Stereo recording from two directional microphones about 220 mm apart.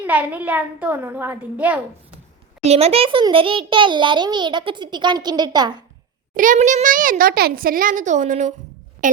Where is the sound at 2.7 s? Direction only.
30° right (ahead or behind).